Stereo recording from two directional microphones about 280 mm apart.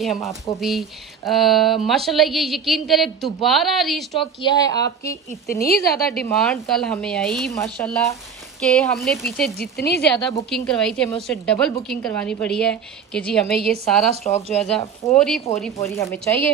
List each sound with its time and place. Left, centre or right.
0.0 s speech: centre
4.2 s a woman's voice: centre
5.6 s a woman's voice: left
6.2 s speech: centre
9.6 s a woman's voice: left
10.3 s speech: centre
14.2 s speech: left
14.6 s a woman's voice: centre